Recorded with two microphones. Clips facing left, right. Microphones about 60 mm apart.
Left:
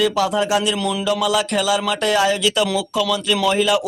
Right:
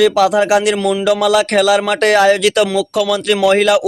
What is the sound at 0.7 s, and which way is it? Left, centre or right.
Speech, right.